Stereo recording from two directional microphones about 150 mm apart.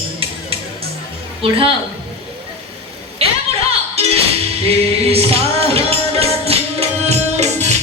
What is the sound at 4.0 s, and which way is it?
Music, 45° right (ahead or behind).